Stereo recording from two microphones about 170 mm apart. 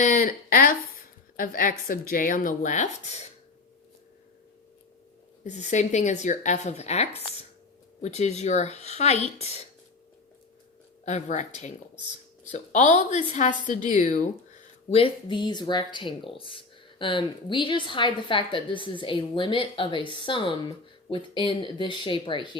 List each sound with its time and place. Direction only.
0.0 s speech: 50° left (ahead or behind)
5.4 s speech: 45° left (ahead or behind)
11.0 s speech: 45° left (ahead or behind)
14.8 s speech: 35° left (ahead or behind)